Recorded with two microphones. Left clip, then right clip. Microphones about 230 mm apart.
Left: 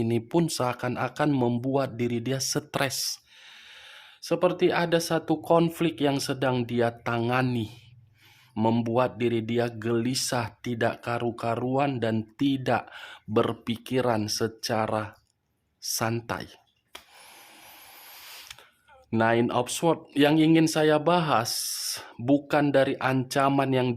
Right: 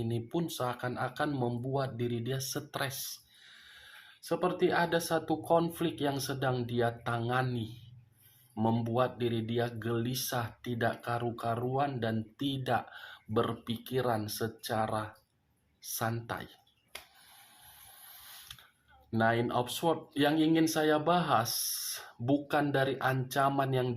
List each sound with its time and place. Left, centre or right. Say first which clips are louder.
0.0 s speech: left 9 dB; left
8.5 s speech: left 6 dB; left
18.3 s mechanisms: left 6 dB; left
19.1 s speech: left 6 dB; left